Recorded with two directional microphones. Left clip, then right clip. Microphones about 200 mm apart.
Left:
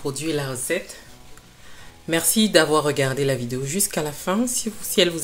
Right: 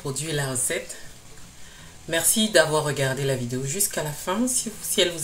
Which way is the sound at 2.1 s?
40° left (ahead or behind).